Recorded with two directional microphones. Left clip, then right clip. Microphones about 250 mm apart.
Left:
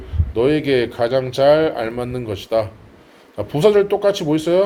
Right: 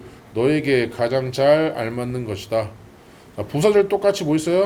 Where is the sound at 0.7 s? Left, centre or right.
Centre.